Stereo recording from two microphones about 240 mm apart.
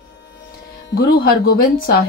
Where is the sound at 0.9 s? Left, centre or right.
Left.